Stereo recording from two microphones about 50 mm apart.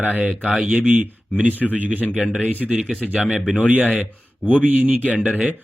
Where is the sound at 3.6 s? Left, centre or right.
Right.